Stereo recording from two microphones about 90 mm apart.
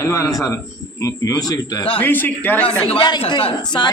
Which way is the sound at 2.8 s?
90° left.